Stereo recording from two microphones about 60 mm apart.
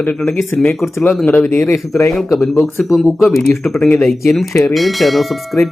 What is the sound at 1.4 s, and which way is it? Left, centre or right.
Speech, left.